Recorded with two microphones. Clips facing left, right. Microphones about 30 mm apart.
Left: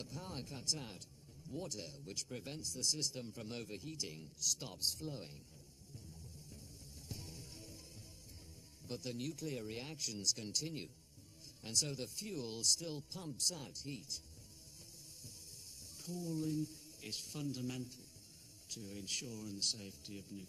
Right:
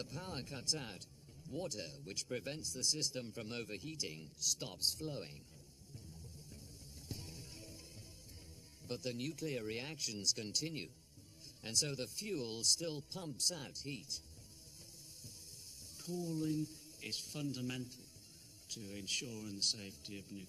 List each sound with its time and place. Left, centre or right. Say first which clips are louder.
0.0 s speech: right 2 dB; right
6.5 s music: even; centre
8.8 s speech: right 2 dB; centre
16.0 s speech: right 1 dB; centre